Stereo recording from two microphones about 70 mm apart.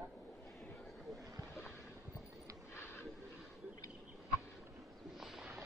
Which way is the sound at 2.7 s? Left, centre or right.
Left.